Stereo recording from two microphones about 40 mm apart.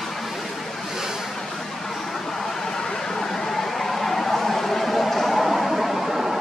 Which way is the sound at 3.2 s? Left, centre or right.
Centre.